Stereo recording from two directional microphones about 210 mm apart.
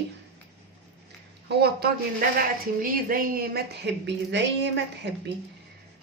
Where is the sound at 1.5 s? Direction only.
50° right (ahead or behind).